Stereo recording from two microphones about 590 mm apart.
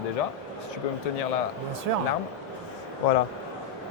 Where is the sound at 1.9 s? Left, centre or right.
Right.